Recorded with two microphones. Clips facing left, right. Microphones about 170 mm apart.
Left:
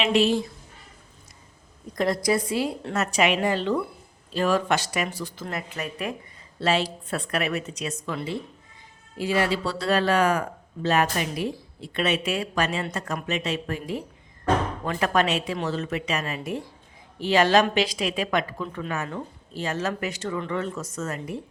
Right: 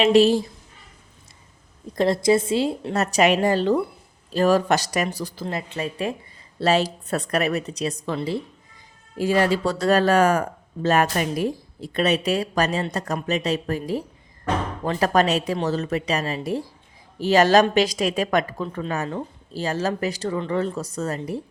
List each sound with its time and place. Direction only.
0.0 s a woman's voice: 35° right (ahead or behind)
2.0 s a woman's voice: 25° right (ahead or behind)
2.9 s a woman's voice: 40° right (ahead or behind)
6.6 s a woman's voice: 40° right (ahead or behind)